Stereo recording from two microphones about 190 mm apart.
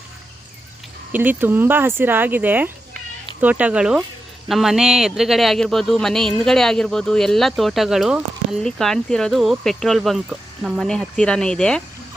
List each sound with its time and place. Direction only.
1.1 s speech: 10° right (ahead or behind)